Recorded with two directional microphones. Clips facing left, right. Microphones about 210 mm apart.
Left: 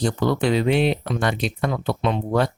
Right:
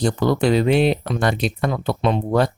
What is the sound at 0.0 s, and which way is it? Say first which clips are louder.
Speech: right 3 dB; 40° right (ahead or behind).